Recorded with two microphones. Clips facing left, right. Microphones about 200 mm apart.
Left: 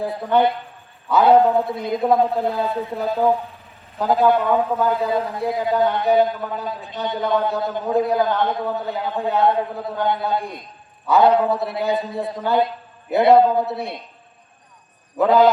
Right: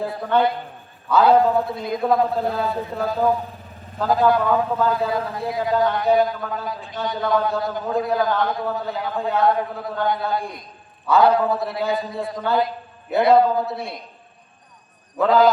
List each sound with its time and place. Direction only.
0.0 s a man's voice: 20° left (ahead or behind)
15.2 s a man's voice: 20° left (ahead or behind)